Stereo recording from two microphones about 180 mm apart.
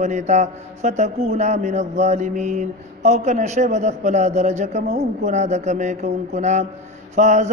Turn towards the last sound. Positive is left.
turn(degrees=-40)  # may be behind; listen again after turning